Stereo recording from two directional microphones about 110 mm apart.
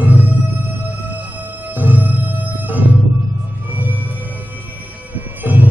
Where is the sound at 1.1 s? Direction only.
15° right (ahead or behind).